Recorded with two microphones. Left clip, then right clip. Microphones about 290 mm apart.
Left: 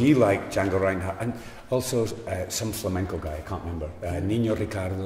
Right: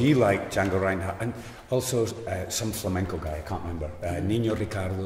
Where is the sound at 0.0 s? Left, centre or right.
Centre.